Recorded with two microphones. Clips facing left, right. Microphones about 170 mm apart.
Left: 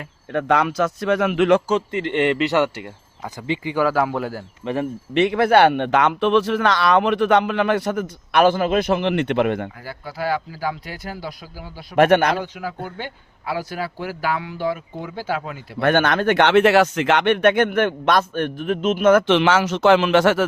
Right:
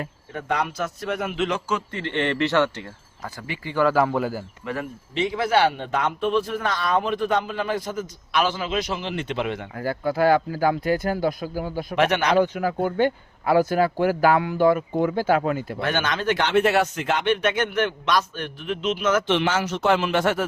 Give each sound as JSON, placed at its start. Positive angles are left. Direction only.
{"t": 0.3, "sound": "a man's voice", "side_deg": 90}
{"t": 1.9, "sound": "speech", "side_deg": 15}
{"t": 3.8, "sound": "a man's voice", "side_deg": 0}
{"t": 4.6, "sound": "speech", "side_deg": 25}
{"t": 5.1, "sound": "speech", "side_deg": 65}
{"t": 9.8, "sound": "speech", "side_deg": -50}
{"t": 11.9, "sound": "speech", "side_deg": 50}
{"t": 12.4, "sound": "speech", "side_deg": -50}
{"t": 15.8, "sound": "a man's voice", "side_deg": 55}
{"t": 19.3, "sound": "a man's voice", "side_deg": 90}